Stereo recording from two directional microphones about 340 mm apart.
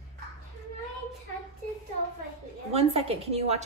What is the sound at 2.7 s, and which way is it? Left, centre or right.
Speech, centre.